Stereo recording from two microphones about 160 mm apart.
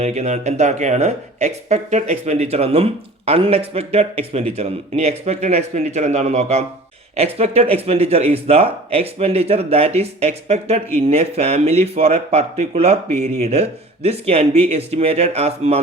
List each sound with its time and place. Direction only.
0.0 s speech: 45° right (ahead or behind)